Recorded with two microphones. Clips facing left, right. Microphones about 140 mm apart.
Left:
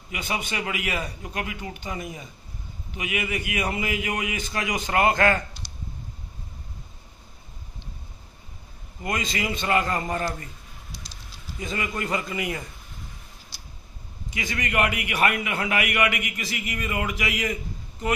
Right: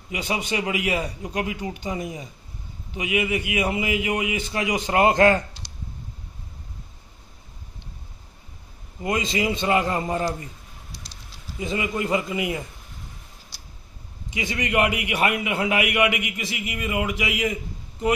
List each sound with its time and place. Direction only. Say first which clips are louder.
0.1 s a man's voice: right 4 dB; 25° right (ahead or behind)
4.4 s a man's voice: right 3 dB; 25° right (ahead or behind)
5.6 s a sound: even; 80° right
9.0 s a man's voice: right 4 dB; 25° right (ahead or behind)
11.6 s a man's voice: right 4 dB; 15° right (ahead or behind)
14.3 s a man's voice: right 3 dB; 20° right (ahead or behind)